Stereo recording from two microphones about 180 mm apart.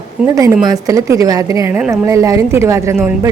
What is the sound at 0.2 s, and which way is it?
Speech, 5° right (ahead or behind).